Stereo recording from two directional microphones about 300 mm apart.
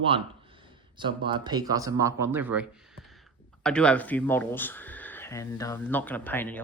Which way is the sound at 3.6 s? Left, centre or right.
Centre.